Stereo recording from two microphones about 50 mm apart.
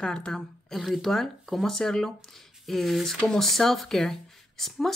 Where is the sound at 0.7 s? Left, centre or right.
Centre.